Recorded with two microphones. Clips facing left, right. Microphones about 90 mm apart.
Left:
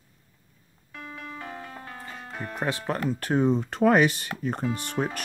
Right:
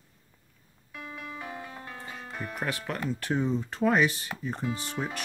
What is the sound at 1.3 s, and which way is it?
Music, 10° right (ahead or behind).